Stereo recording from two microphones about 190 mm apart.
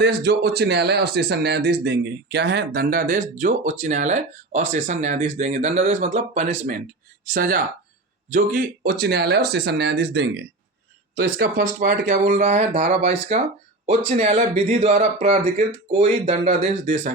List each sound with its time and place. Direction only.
0.0 s speech: 60° right (ahead or behind); by 6.7 s 40° right (ahead or behind)
7.3 s speech: 50° right (ahead or behind)